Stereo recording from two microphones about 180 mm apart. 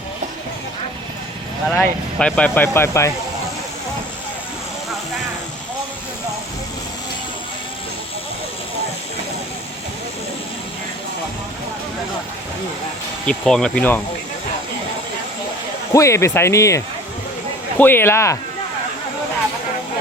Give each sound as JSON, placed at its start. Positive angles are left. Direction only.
{"t": 1.8, "sound": "speech", "side_deg": 5}
{"t": 13.2, "sound": "speech", "side_deg": 5}
{"t": 15.9, "sound": "speech", "side_deg": 15}